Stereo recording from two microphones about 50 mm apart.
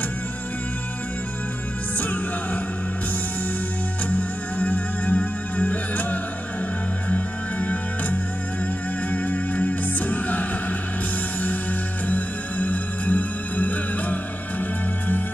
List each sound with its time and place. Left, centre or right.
2.0 s music: left
4.1 s music: left
12.1 s music: left